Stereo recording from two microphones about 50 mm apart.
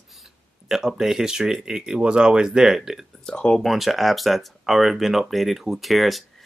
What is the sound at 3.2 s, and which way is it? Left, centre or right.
Speech, centre.